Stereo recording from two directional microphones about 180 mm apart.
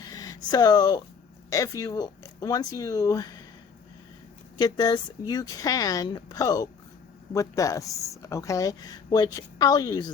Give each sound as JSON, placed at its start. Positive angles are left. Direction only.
{"t": 0.0, "sound": "a sound", "side_deg": 20}
{"t": 1.5, "sound": "speech", "side_deg": 20}
{"t": 4.5, "sound": "speech", "side_deg": 20}